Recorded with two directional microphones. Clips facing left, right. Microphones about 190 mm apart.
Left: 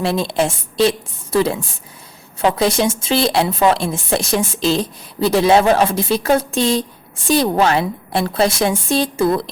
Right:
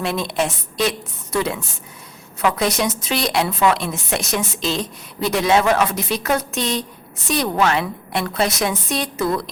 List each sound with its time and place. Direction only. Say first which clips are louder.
0.0 s a woman's voice: left 4 dB; 30° left (ahead or behind)